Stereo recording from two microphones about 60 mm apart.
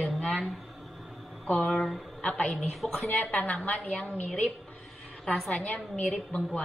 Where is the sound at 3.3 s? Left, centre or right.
Left.